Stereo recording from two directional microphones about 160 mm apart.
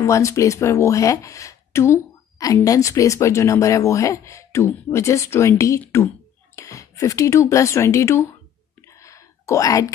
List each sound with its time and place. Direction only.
0.0 s speech: 20° left (ahead or behind)
9.0 s whispering: 20° left (ahead or behind)